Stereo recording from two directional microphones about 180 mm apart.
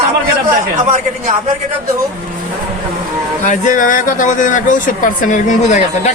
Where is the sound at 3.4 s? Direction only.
45° left (ahead or behind).